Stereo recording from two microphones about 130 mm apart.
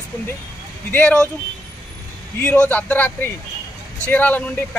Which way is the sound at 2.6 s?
15° left (ahead or behind).